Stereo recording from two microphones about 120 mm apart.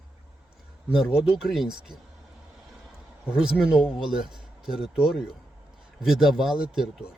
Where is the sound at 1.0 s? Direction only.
Centre (ahead or behind).